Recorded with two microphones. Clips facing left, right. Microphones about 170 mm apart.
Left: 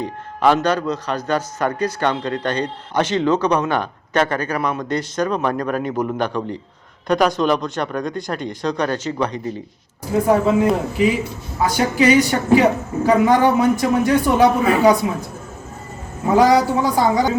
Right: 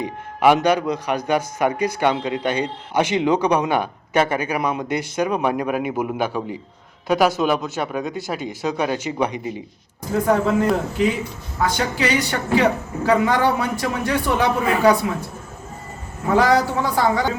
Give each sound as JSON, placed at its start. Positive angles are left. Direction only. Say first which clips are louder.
{"t": 0.0, "sound": "speech", "louder": "even", "side_deg": -10}
{"t": 10.1, "sound": "a man's voice", "louder": "left 3 dB", "side_deg": 5}
{"t": 16.3, "sound": "a man's voice", "louder": "left 3 dB", "side_deg": 15}